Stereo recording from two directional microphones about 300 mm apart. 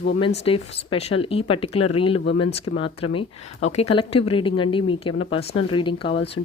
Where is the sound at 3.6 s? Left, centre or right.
Left.